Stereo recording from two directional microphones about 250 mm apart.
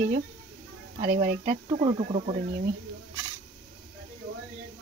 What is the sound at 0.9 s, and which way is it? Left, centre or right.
Speech, right.